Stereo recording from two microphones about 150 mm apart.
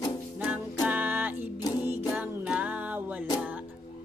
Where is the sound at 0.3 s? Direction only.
5° right (ahead or behind).